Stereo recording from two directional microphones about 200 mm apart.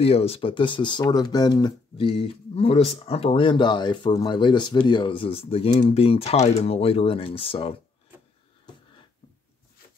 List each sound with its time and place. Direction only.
0.0 s speech: 30° left (ahead or behind)